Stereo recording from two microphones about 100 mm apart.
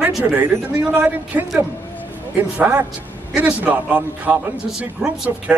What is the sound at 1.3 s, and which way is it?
Speech, 15° right (ahead or behind).